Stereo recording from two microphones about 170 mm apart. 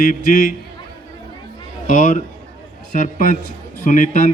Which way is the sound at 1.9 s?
50° left (ahead or behind).